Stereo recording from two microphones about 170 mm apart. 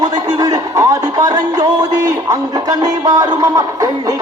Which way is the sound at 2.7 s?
20° right (ahead or behind).